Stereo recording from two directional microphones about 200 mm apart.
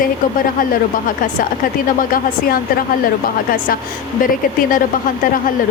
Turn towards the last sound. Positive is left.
turn(degrees=45)  # may be behind; listen again after turning